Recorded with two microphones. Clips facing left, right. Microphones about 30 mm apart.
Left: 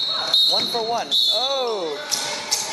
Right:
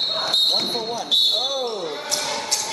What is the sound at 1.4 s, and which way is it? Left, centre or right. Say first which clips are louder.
Speech: left 2 dB; left.